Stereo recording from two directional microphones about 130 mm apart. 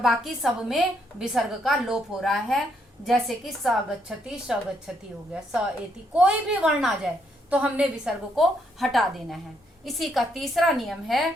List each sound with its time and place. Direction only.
0.0 s a woman's voice: centre (ahead or behind)